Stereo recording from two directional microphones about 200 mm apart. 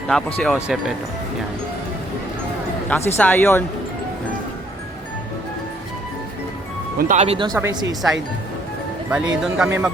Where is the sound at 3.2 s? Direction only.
10° left (ahead or behind).